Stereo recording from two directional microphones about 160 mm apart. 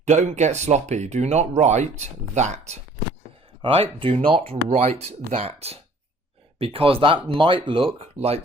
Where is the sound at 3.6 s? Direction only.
35° right (ahead or behind).